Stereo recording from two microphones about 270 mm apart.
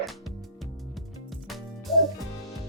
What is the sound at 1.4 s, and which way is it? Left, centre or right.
Music, centre.